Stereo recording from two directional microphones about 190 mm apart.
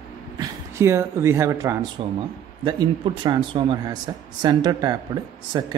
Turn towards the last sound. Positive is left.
turn(degrees=-20)  # may be behind; listen again after turning